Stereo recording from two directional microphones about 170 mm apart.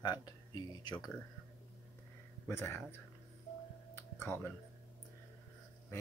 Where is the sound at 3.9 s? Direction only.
15° left (ahead or behind).